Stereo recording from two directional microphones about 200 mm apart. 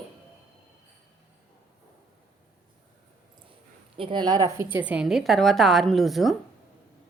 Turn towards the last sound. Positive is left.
turn(degrees=0)  # may be behind; listen again after turning